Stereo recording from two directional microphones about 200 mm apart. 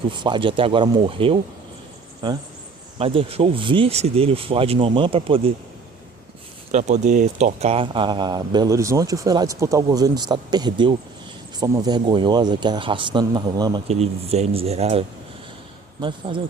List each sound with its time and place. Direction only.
0.1 s speech: 25° right (ahead or behind)
6.7 s speech: 35° right (ahead or behind)
13.8 s speech: 30° right (ahead or behind)